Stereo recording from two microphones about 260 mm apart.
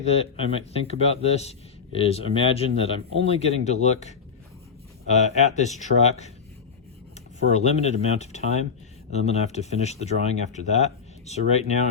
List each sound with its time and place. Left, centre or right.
0.0 s speech: left
7.5 s speech: left